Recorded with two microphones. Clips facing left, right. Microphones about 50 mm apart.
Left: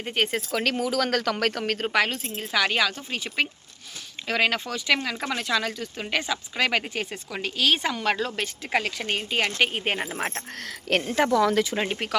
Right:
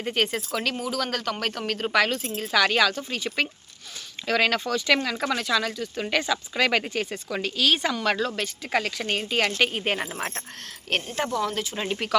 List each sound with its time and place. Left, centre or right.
0.0 s speech: centre
0.5 s speech: left
1.6 s speech: left
1.9 s speech: left
9.0 s speech: centre
11.2 s speech: left
11.9 s speech: left